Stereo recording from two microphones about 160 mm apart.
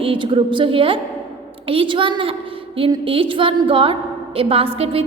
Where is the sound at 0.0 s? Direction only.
35° right (ahead or behind).